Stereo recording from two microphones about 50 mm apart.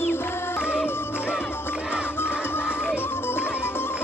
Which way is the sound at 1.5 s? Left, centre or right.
Left.